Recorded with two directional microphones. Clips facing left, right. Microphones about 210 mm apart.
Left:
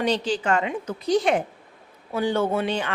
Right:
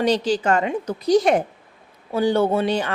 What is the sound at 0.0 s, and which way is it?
A woman's voice, 40° right (ahead or behind).